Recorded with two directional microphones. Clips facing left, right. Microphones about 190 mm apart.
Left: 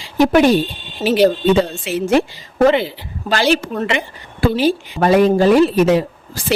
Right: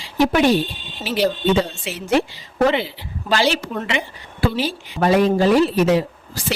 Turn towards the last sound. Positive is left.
turn(degrees=50)  # may be behind; listen again after turning